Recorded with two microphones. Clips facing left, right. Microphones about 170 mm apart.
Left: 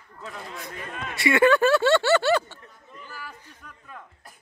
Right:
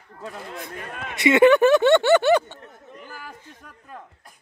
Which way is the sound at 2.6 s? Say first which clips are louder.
Right 4 dB; 55° right (ahead or behind).